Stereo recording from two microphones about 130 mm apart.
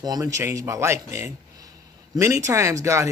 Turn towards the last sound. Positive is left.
turn(degrees=-25)  # may be behind; listen again after turning